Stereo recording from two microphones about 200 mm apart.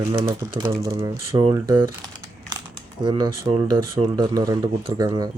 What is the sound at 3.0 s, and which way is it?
Speech, 20° right (ahead or behind).